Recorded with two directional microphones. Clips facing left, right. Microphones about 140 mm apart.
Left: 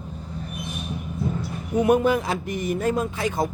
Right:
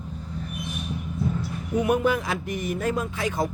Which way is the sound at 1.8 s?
30° left (ahead or behind).